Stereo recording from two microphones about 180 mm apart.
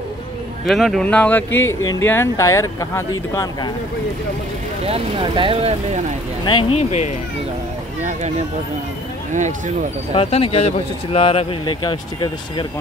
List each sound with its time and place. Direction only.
0.7 s speech: centre (ahead or behind); by 3.7 s 20° left (ahead or behind)
4.8 s speech: 30° right (ahead or behind)
6.4 s speech: 30° left (ahead or behind)
9.3 s speech: 45° right (ahead or behind)
10.1 s speech: 35° left (ahead or behind)